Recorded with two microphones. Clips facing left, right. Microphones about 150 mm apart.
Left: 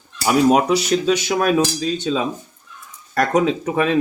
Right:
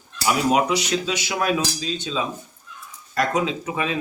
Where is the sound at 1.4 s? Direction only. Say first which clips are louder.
Left 6 dB; 50° left (ahead or behind).